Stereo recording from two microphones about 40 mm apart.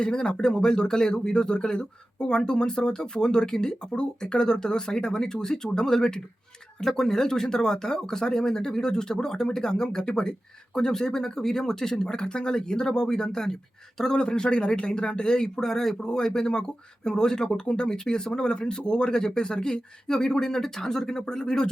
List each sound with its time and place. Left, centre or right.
0.0 s speech: centre